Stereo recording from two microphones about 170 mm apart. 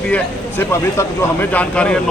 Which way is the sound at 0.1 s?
10° left (ahead or behind).